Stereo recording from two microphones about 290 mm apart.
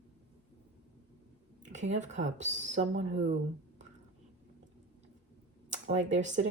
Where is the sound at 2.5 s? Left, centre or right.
Right.